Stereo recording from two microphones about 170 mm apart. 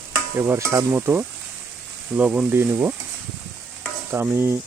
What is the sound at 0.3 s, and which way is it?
Speech, 15° right (ahead or behind).